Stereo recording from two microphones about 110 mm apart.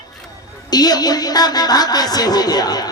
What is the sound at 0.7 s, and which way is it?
Speech, 40° left (ahead or behind).